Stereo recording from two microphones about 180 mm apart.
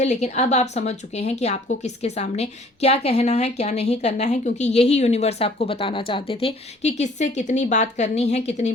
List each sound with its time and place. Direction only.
0.0 s a woman's voice: 40° left (ahead or behind)